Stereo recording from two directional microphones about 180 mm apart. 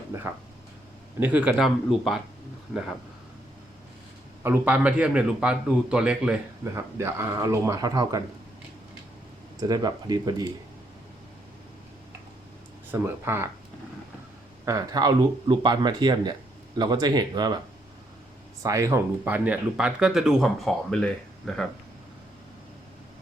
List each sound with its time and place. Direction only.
1.2 s speech: 10° right (ahead or behind)
4.4 s speech: 10° right (ahead or behind)
9.6 s speech: 20° right (ahead or behind)
12.9 s speech: 15° right (ahead or behind)
14.6 s speech: 20° right (ahead or behind)
18.6 s speech: 15° right (ahead or behind); by 21.7 s 5° left (ahead or behind)